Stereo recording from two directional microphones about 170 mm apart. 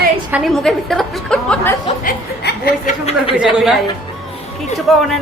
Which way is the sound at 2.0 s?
70° left (ahead or behind).